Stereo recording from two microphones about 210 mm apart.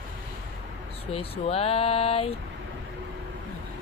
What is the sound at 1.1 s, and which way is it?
Speech, 30° left (ahead or behind).